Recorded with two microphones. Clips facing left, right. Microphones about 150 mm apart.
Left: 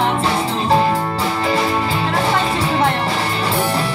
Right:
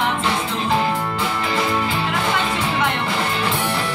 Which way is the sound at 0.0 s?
35° left (ahead or behind).